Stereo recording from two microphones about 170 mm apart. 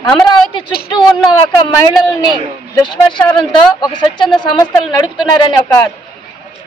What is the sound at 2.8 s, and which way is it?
Speech, 25° left (ahead or behind).